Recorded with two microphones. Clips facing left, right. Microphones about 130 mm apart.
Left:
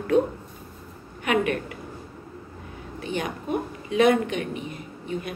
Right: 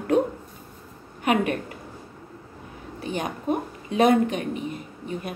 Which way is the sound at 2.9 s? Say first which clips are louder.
Even; 40° right (ahead or behind).